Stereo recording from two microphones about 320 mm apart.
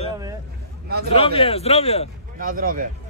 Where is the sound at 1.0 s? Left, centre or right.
Centre.